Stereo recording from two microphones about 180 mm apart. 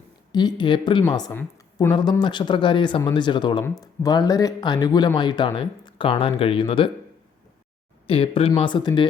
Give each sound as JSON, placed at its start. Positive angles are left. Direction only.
{"t": 0.3, "sound": "a woman's voice", "side_deg": 25}
{"t": 2.0, "sound": "speech", "side_deg": 25}
{"t": 8.0, "sound": "speech", "side_deg": 30}